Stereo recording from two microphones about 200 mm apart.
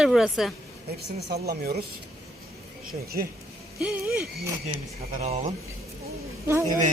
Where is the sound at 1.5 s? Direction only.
50° right (ahead or behind).